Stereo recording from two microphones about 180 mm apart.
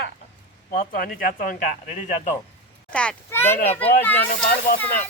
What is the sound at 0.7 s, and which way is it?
Speech, 50° left (ahead or behind).